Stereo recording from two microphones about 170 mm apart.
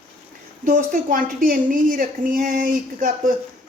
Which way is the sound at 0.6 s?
50° right (ahead or behind).